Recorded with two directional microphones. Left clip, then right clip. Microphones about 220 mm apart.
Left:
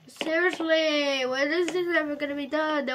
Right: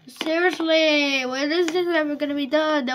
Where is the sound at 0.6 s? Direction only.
25° right (ahead or behind).